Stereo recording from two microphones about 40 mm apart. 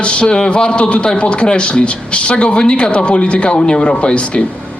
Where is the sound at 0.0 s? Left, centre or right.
Left.